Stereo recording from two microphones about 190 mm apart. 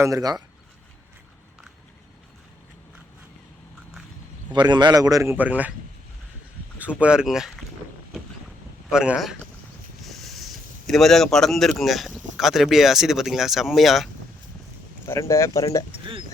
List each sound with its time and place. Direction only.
0.0 s a man's voice: 20° right (ahead or behind)
4.5 s a man's voice: 25° right (ahead or behind); by 5.7 s 10° right (ahead or behind)
6.7 s speech: 5° right (ahead or behind)
8.9 s speech: 5° right (ahead or behind)
10.0 s a sound: centre (ahead or behind)
12.4 s speech: centre (ahead or behind)
15.0 s speech: 15° left (ahead or behind)
15.9 s a man's voice: 25° right (ahead or behind)